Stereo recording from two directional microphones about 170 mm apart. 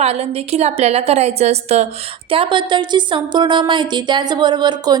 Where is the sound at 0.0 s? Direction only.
40° right (ahead or behind).